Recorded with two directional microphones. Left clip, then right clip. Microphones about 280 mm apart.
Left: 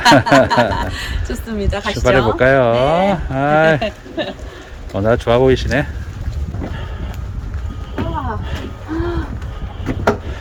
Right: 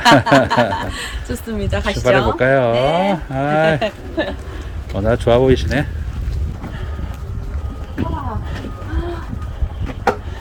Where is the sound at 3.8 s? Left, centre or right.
Centre.